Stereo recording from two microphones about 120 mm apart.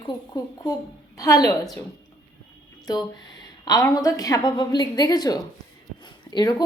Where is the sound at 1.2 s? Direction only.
25° left (ahead or behind).